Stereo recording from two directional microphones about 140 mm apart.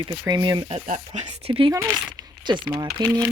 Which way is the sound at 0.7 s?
60° right (ahead or behind).